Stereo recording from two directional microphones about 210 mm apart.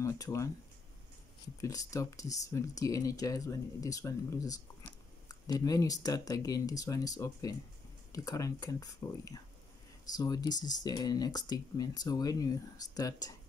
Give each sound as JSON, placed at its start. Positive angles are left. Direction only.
{"t": 0.0, "sound": "speech", "side_deg": 15}
{"t": 1.6, "sound": "speech", "side_deg": 15}